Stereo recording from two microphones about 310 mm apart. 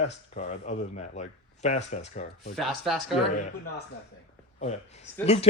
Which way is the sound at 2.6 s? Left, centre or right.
Centre.